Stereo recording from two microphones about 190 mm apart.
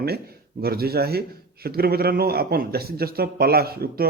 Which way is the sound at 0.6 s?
55° right (ahead or behind).